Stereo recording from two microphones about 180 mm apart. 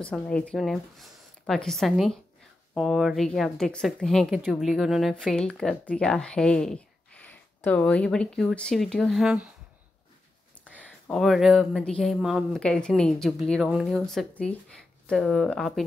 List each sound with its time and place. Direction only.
0.0 s speech: 5° left (ahead or behind)
10.8 s speech: 5° left (ahead or behind)